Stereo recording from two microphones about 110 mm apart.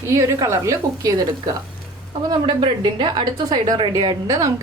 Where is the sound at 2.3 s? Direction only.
45° right (ahead or behind).